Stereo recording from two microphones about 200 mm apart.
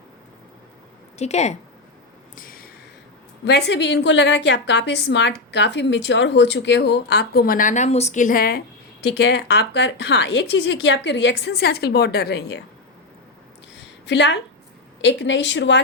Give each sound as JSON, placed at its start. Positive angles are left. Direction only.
{"t": 1.2, "sound": "speech", "side_deg": 35}
{"t": 2.3, "sound": "a sound", "side_deg": 45}
{"t": 3.4, "sound": "a woman's voice", "side_deg": 55}
{"t": 14.1, "sound": "a woman's voice", "side_deg": 65}